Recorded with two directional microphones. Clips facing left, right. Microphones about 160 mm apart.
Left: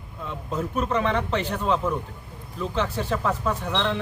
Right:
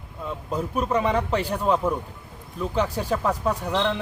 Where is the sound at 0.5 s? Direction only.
10° right (ahead or behind).